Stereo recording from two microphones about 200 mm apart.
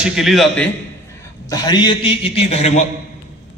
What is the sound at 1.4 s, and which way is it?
A man's voice, 20° left (ahead or behind).